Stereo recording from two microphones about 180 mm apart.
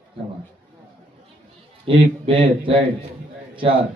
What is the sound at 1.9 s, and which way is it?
Speech, 30° right (ahead or behind).